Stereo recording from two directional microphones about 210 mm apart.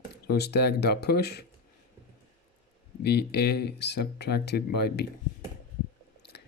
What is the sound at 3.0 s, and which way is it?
Speech, 50° left (ahead or behind).